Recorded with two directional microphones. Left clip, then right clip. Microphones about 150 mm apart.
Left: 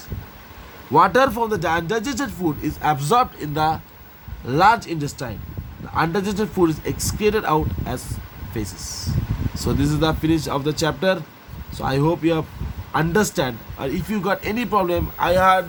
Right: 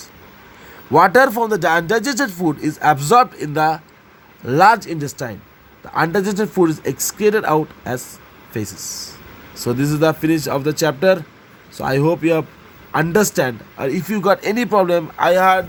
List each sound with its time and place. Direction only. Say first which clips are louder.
0.9 s speech: right 4 dB; 35° right (ahead or behind)